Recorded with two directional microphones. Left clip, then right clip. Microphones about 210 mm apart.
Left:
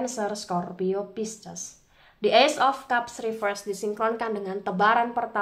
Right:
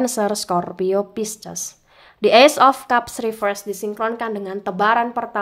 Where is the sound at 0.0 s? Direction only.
40° right (ahead or behind).